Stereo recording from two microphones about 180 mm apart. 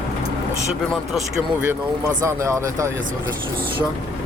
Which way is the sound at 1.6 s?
10° right (ahead or behind).